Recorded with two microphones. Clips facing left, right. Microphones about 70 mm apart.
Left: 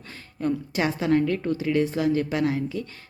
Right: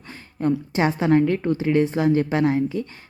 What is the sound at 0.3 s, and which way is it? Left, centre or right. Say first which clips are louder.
A woman's voice: right 4 dB; right.